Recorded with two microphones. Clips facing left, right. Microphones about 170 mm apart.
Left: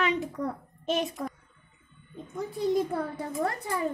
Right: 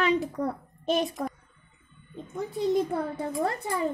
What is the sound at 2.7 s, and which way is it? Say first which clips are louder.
Speech: right 1 dB; 25° right (ahead or behind).